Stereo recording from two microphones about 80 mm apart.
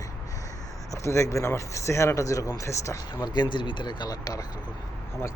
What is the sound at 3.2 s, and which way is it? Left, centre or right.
Speech, left.